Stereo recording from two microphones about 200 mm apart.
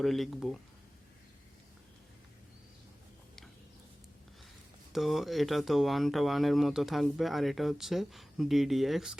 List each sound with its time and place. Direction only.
0.0 s speech: centre (ahead or behind)
4.9 s speech: centre (ahead or behind)